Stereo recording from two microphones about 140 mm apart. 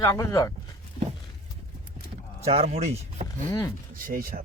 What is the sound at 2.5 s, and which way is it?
Speech, 45° right (ahead or behind).